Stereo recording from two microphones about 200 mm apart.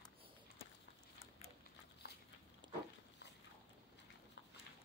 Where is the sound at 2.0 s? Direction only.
55° left (ahead or behind).